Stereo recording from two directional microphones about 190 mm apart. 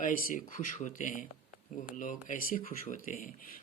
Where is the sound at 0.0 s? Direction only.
45° left (ahead or behind).